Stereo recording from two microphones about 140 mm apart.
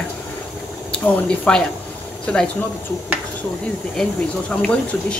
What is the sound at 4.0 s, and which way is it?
Speech, 5° left (ahead or behind).